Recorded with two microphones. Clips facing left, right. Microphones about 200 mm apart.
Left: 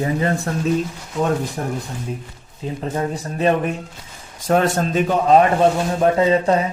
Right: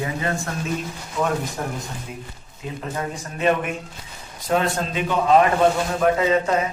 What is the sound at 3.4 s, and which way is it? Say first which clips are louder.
A man's voice: left 3 dB; 35° left (ahead or behind).